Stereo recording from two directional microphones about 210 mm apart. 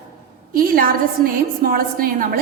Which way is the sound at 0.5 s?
45° right (ahead or behind).